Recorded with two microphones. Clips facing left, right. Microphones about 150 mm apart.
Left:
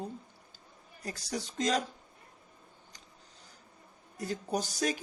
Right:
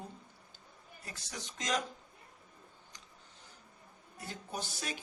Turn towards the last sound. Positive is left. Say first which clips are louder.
# left 9 dB
turn(degrees=40)  # may be behind; listen again after turning